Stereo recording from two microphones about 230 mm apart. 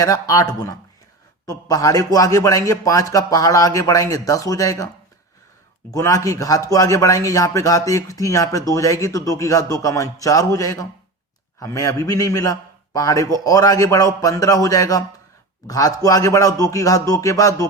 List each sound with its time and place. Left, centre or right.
0.0 s a man's voice: centre
5.9 s a man's voice: centre